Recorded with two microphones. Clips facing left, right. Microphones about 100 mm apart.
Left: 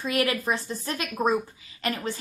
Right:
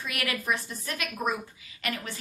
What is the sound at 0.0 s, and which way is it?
A woman's voice, 30° left (ahead or behind).